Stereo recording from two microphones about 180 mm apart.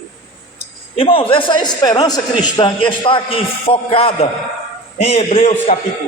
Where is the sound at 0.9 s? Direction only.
30° left (ahead or behind).